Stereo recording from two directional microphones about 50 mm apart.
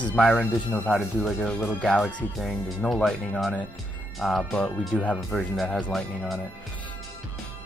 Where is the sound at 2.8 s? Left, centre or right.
Centre.